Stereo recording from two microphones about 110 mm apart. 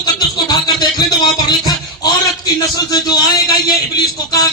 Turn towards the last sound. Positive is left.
turn(degrees=40)  # may be behind; listen again after turning